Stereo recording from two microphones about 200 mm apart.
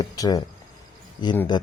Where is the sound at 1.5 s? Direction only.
20° left (ahead or behind).